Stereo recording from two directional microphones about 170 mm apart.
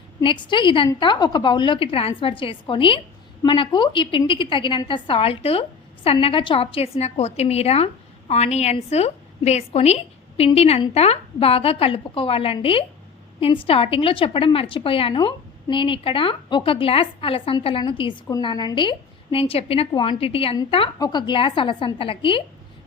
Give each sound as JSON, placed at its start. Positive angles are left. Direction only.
{"t": 0.4, "sound": "a woman's voice", "side_deg": 30}